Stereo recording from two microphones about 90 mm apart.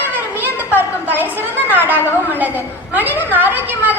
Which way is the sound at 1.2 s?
20° right (ahead or behind).